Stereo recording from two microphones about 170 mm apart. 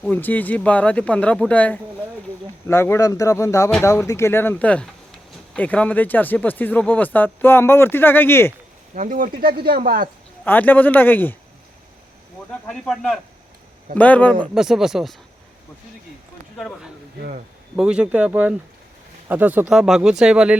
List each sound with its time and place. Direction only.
0.0 s speech: 10° left (ahead or behind)
9.0 s speech: 50° right (ahead or behind)
9.4 s speech: 60° right (ahead or behind)
10.4 s speech: 10° left (ahead or behind)
12.5 s speech: 5° left (ahead or behind)
14.5 s speech: 5° right (ahead or behind)
16.6 s speech: centre (ahead or behind)
17.2 s speech: 55° right (ahead or behind)
17.7 s speech: 5° right (ahead or behind)